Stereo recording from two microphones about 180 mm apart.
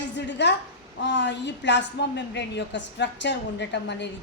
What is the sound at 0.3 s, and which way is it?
A woman's voice, 75° left (ahead or behind).